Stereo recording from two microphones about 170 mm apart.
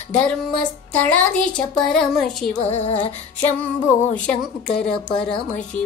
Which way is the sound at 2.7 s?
40° left (ahead or behind).